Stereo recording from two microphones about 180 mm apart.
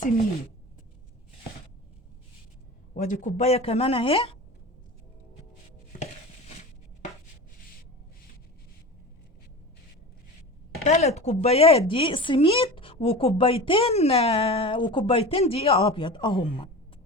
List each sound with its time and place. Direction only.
2.9 s speech: 45° left (ahead or behind)
10.8 s speech: 40° left (ahead or behind)